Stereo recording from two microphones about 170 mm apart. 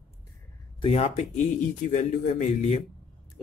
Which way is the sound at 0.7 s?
35° left (ahead or behind).